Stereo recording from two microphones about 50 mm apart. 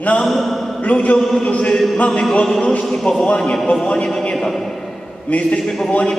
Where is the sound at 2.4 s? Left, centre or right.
Centre.